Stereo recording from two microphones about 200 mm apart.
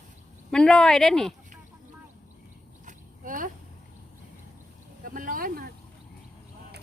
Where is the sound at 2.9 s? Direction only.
40° right (ahead or behind).